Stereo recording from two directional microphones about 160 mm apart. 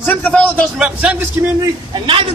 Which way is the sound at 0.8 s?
10° right (ahead or behind).